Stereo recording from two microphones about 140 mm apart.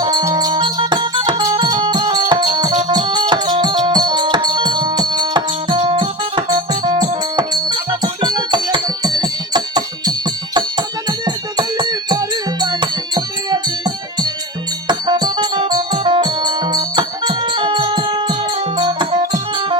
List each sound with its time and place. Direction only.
0.0 s music: 30° right (ahead or behind)